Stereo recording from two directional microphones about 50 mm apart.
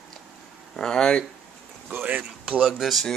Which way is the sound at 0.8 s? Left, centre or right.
Centre.